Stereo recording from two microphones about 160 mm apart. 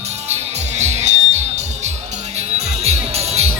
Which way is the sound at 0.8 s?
45° right (ahead or behind).